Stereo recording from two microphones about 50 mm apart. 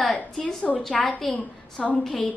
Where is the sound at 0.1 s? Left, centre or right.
Left.